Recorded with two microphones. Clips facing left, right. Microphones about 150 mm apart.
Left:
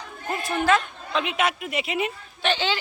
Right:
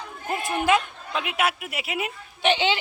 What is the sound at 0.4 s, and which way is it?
Speech, 15° right (ahead or behind).